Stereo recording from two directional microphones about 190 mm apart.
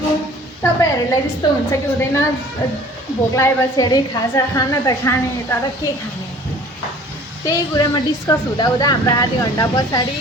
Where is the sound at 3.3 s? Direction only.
15° left (ahead or behind).